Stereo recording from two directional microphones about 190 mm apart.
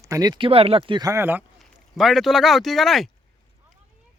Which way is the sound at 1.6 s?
Centre (ahead or behind).